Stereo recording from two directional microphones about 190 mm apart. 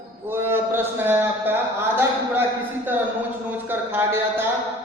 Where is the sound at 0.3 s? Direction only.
10° right (ahead or behind).